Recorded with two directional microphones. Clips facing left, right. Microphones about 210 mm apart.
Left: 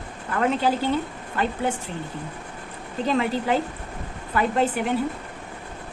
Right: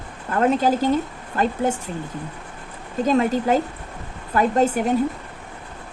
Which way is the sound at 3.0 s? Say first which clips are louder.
Right 4 dB; 45° right (ahead or behind).